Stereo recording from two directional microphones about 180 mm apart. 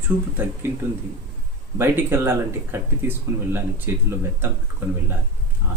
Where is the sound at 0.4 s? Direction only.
10° right (ahead or behind).